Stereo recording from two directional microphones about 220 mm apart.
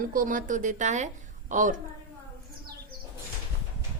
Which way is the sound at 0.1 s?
40° right (ahead or behind).